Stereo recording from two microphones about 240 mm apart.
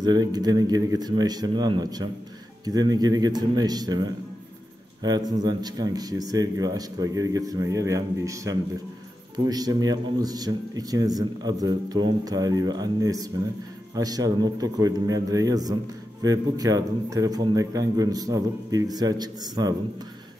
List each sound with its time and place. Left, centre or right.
0.0 s a man's voice: centre